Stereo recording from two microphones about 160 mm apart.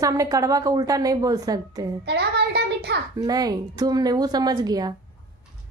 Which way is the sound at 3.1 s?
25° right (ahead or behind).